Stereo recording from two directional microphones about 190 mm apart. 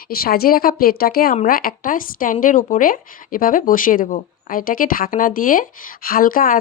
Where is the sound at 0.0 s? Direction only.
50° left (ahead or behind).